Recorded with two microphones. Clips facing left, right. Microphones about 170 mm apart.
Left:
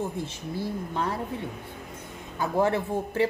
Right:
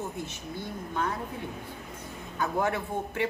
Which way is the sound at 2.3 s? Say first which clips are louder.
Left 4 dB; 30° left (ahead or behind).